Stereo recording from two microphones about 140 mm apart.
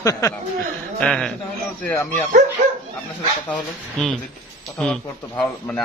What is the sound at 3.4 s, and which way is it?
A man's voice, 5° left (ahead or behind).